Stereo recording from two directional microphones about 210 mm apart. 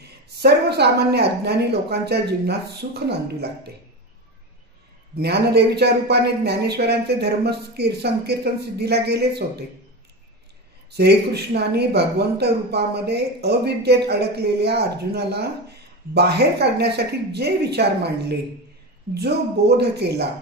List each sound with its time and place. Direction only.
0.4 s speech: 50° right (ahead or behind)
5.1 s speech: 50° right (ahead or behind)
10.9 s speech: 50° right (ahead or behind)
19.8 s speech: 50° right (ahead or behind)